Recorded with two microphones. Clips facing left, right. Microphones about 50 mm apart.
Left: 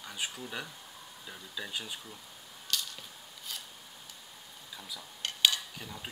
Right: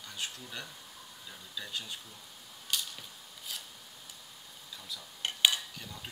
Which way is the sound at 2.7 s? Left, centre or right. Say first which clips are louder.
Even; centre.